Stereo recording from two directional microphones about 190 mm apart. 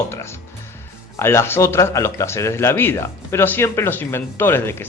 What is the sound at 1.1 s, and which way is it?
Speech, 15° left (ahead or behind).